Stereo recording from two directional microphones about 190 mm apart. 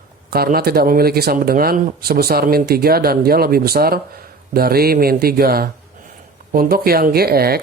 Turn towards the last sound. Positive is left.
turn(degrees=-55)  # may be behind; listen again after turning